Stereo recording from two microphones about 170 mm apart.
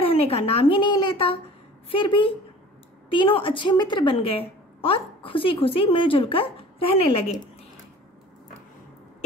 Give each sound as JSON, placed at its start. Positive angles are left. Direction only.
{"t": 0.1, "sound": "a woman's voice", "side_deg": 35}